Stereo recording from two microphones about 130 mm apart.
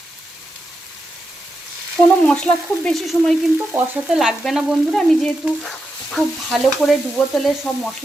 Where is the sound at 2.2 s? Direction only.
5° left (ahead or behind).